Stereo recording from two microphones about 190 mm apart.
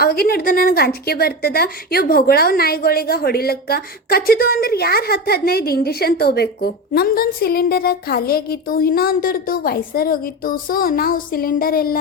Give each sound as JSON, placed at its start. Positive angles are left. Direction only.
{"t": 0.0, "sound": "a woman's voice", "side_deg": 50}